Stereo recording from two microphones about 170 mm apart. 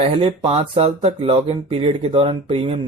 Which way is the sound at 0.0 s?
35° right (ahead or behind).